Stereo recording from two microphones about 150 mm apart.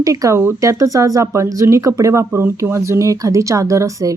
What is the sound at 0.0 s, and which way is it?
Speech, 25° right (ahead or behind).